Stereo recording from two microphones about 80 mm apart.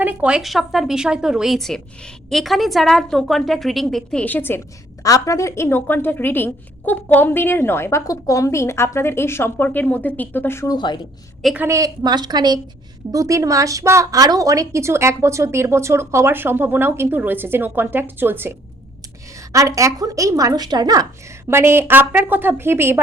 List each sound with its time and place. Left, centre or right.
0.0 s a woman's voice: centre
0.4 s a woman's voice: centre
1.5 s a woman's voice: centre
4.2 s a woman's voice: left
5.0 s a woman's voice: left
10.7 s a woman's voice: left
11.4 s a woman's voice: centre
12.0 s a woman's voice: right
13.1 s a woman's voice: right
19.4 s speech: right
21.4 s a woman's voice: right